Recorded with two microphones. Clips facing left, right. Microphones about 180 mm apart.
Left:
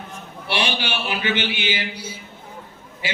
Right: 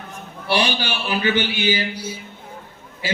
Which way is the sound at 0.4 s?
40° right (ahead or behind).